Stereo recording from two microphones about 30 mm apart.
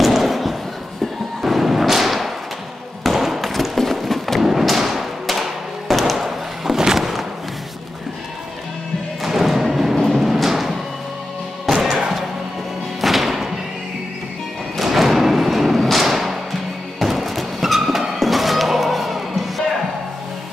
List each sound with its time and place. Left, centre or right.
0.0 s a sound: centre
1.4 s thump: centre
3.0 s basketball bounce: centre
3.7 s a sound: centre
4.4 s thump: centre
5.3 s a sound: centre
6.6 s a sound: centre
7.0 s music: centre
9.3 s music: centre
11.7 s music: centre
13.0 s music: centre
14.8 s thump: centre
17.0 s music: centre